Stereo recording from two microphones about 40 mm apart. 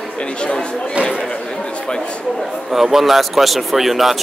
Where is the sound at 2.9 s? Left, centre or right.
Centre.